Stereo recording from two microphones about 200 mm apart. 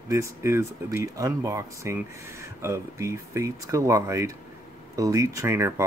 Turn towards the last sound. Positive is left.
turn(degrees=-15)  # may be behind; listen again after turning